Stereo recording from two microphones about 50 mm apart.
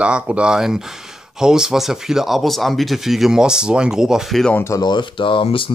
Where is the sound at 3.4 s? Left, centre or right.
Centre.